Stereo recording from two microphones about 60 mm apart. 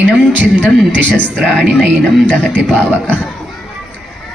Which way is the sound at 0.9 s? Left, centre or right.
Left.